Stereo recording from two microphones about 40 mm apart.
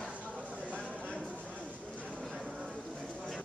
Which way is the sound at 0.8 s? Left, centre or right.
Left.